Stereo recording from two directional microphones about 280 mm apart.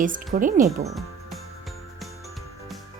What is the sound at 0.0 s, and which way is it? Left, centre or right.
Speech, right.